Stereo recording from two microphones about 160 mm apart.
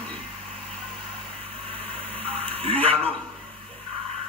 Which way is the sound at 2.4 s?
40° right (ahead or behind).